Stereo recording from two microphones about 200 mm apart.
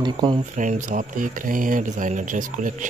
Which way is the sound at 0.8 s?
40° right (ahead or behind).